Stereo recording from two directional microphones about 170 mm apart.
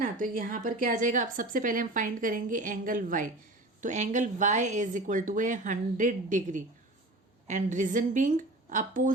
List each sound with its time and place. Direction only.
0.0 s a woman's voice: 50° right (ahead or behind)